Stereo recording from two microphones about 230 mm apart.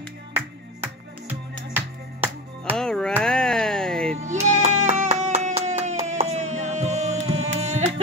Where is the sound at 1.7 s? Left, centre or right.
Centre.